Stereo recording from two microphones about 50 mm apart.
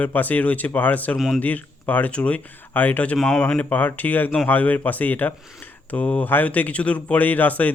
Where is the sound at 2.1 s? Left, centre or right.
Left.